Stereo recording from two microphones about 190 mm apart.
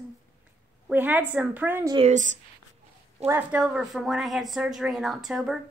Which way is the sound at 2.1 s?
40° right (ahead or behind).